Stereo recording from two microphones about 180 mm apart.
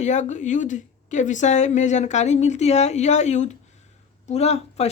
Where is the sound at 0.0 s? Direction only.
40° left (ahead or behind).